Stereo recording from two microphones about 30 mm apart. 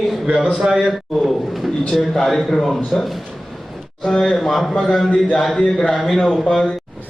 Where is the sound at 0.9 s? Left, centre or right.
Centre.